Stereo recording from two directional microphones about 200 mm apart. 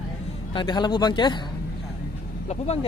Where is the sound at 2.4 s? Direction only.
30° left (ahead or behind).